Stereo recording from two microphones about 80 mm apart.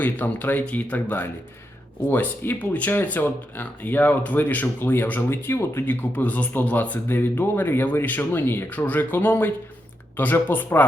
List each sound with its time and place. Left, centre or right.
0.0 s speech: left